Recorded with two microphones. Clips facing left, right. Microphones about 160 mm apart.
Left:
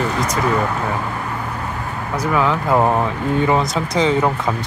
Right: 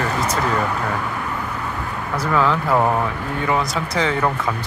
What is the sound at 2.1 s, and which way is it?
Speech, 15° left (ahead or behind).